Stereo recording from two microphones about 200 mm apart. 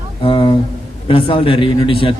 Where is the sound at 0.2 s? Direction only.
25° left (ahead or behind).